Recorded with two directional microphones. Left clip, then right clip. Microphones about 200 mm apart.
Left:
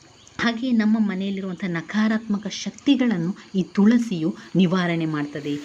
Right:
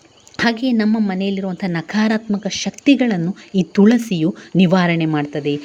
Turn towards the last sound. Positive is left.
turn(degrees=-25)  # may be behind; listen again after turning